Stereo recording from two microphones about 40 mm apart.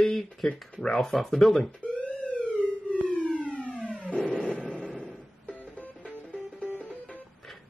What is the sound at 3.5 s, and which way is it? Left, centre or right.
Theremin, left.